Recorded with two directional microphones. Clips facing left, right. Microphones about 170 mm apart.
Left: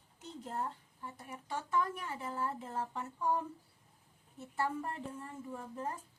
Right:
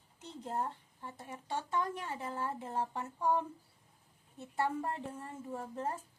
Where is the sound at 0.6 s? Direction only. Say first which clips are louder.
Even; 25° right (ahead or behind).